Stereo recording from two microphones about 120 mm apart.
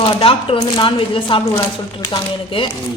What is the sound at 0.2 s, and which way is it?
Speech, 50° left (ahead or behind).